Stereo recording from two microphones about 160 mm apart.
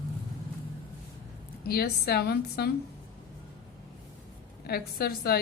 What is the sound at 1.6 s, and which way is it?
A woman's voice, 75° left (ahead or behind).